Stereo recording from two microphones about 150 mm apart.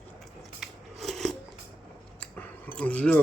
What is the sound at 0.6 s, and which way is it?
Scissors, centre (ahead or behind).